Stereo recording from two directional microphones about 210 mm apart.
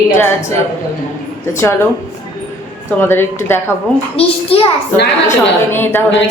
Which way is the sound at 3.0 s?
10° left (ahead or behind).